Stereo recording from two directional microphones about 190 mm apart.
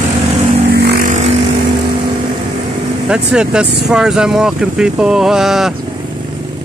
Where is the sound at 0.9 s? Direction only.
45° right (ahead or behind).